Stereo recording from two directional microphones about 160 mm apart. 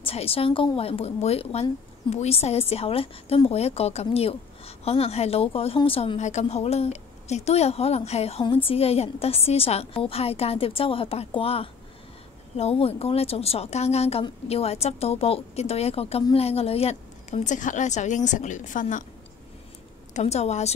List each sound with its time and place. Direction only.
0.0 s a woman's voice: 35° left (ahead or behind); by 19.0 s 55° left (ahead or behind)
20.2 s a woman's voice: 45° left (ahead or behind)